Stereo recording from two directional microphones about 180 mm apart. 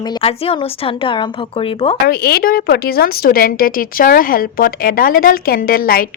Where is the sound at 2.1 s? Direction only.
60° left (ahead or behind).